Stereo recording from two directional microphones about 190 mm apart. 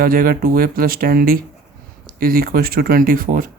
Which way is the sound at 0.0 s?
50° right (ahead or behind).